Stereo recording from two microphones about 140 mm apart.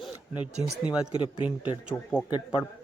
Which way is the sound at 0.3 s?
10° right (ahead or behind).